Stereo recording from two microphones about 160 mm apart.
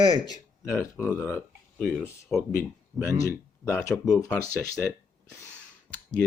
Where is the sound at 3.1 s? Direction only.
20° left (ahead or behind).